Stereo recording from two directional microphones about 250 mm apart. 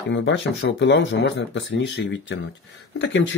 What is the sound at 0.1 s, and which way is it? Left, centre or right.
Speech, left.